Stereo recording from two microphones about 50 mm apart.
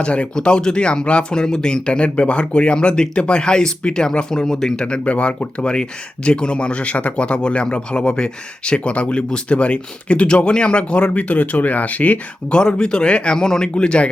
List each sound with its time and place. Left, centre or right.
0.0 s speech: left
0.3 s speech: centre; by 12.2 s left
12.5 s speech: centre